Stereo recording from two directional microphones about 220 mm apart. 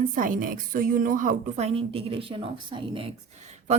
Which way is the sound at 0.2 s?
40° right (ahead or behind).